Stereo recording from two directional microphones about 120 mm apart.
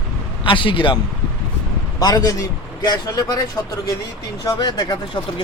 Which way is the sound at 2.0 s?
30° left (ahead or behind).